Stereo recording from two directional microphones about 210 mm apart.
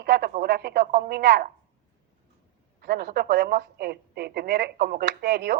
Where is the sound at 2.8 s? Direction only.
50° right (ahead or behind).